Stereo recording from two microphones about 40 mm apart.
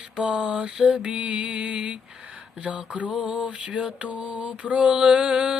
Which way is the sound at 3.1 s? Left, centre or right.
Centre.